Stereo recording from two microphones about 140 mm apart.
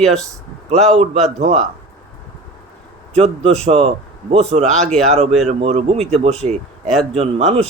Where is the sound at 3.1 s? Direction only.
45° right (ahead or behind).